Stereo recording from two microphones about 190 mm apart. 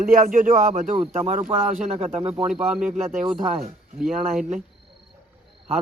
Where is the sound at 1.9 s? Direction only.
30° right (ahead or behind).